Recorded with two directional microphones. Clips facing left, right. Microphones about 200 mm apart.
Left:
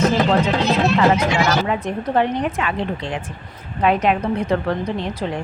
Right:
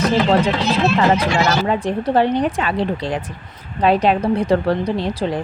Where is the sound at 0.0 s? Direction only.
35° right (ahead or behind).